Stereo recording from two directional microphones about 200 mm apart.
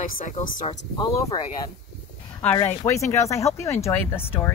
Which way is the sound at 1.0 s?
20° left (ahead or behind).